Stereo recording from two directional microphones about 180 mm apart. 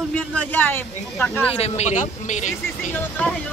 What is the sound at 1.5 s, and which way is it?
A man's voice, 35° left (ahead or behind).